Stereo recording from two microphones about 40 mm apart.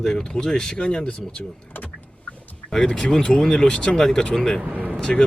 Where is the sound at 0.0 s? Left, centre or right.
Centre.